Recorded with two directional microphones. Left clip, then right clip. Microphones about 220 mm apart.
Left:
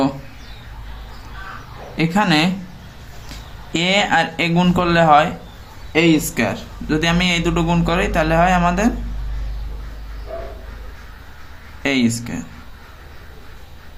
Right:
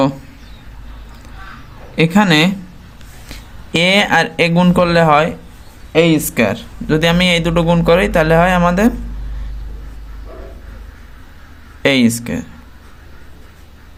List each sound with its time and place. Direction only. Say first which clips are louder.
2.0 s speech: right 4 dB; 35° right (ahead or behind)
3.7 s speech: right 4 dB; 40° right (ahead or behind)
11.8 s speech: right 6 dB; 45° right (ahead or behind)